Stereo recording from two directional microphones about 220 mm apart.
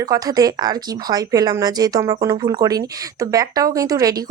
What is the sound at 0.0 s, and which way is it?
Speech, 15° right (ahead or behind).